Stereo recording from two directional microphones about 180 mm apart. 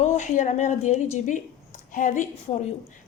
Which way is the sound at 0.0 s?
40° left (ahead or behind).